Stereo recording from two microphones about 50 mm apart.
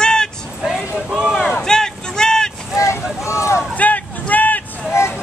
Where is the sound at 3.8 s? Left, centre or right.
Left.